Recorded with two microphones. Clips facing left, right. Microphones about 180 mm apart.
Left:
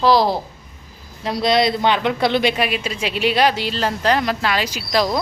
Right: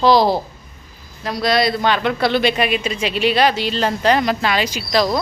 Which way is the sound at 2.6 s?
5° left (ahead or behind).